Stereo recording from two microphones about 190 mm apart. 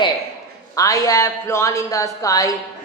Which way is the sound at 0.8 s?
15° left (ahead or behind).